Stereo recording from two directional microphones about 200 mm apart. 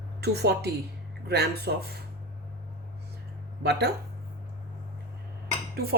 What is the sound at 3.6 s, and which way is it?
Speech, 55° right (ahead or behind).